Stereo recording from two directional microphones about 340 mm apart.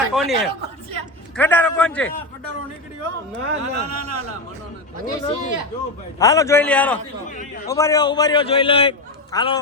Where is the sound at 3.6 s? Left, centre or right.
Right.